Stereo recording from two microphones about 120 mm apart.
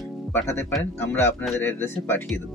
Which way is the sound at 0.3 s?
20° left (ahead or behind).